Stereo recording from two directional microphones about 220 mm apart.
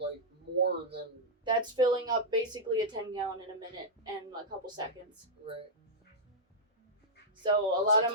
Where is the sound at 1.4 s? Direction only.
20° right (ahead or behind).